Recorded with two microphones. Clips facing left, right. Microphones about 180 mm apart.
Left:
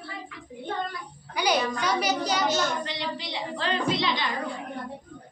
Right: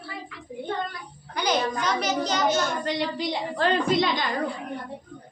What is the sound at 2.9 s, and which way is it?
A child's voice, 45° right (ahead or behind).